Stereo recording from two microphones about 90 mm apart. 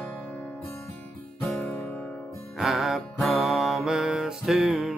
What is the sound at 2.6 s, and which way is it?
Music, 5° right (ahead or behind).